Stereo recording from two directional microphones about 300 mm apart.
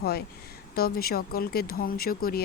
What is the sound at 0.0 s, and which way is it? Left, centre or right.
Speech, left.